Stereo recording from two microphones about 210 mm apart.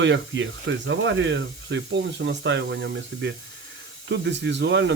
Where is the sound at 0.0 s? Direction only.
60° right (ahead or behind).